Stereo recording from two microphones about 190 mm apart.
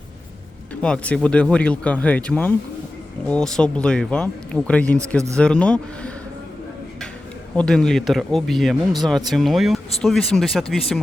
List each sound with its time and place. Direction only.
0.8 s speech: 5° left (ahead or behind)
7.5 s speech: 5° left (ahead or behind)